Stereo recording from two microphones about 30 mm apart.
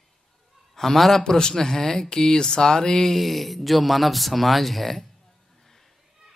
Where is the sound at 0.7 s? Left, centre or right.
Centre.